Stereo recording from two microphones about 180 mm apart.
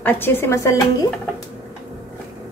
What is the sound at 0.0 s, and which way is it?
Speech, 10° left (ahead or behind).